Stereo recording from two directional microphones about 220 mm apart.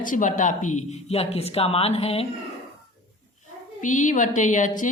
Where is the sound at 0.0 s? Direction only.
35° left (ahead or behind).